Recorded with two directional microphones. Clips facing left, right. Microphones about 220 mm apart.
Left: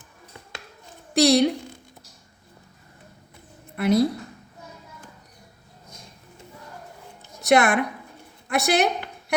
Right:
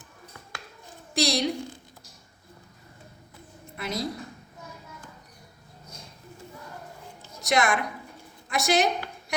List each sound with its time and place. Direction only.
1.1 s a woman's voice: 60° left (ahead or behind)
3.8 s a woman's voice: 60° left (ahead or behind)
7.4 s a woman's voice: 60° left (ahead or behind)